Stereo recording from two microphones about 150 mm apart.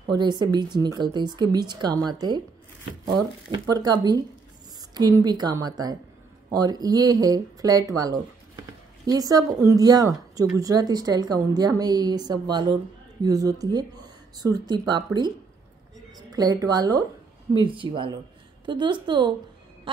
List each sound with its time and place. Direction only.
0.0 s speech: 30° right (ahead or behind)
3.5 s speech: 25° right (ahead or behind)
16.2 s a woman's voice: 25° right (ahead or behind)